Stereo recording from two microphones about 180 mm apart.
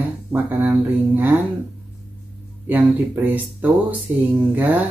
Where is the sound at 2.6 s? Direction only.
10° right (ahead or behind).